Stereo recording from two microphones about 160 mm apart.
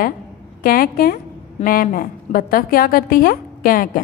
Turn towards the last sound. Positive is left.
turn(degrees=60)  # may be behind; listen again after turning